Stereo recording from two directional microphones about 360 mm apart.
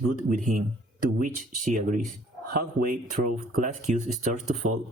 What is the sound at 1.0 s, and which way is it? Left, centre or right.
Speech, right.